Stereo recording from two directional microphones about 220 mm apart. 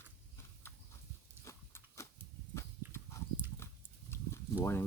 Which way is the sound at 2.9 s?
15° left (ahead or behind).